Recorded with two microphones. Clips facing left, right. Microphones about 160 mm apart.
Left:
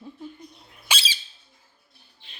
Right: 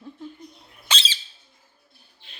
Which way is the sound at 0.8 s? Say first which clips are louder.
Even; 10° left (ahead or behind).